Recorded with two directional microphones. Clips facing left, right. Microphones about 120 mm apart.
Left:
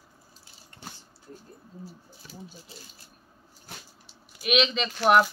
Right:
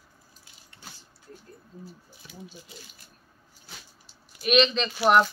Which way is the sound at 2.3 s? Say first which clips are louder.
Even; 35° left (ahead or behind).